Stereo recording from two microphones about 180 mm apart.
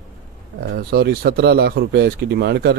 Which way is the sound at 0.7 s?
60° right (ahead or behind).